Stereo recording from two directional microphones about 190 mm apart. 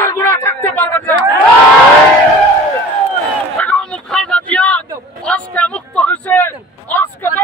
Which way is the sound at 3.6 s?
5° left (ahead or behind).